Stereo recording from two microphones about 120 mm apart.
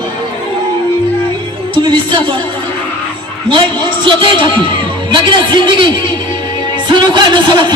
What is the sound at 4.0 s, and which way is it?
A man's voice, 45° right (ahead or behind).